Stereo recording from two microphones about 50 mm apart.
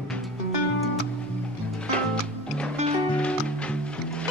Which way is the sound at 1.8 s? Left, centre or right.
Left.